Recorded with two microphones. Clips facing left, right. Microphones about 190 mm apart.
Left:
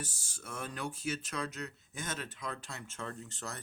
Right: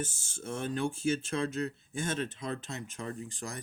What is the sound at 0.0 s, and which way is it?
Speech, 25° right (ahead or behind).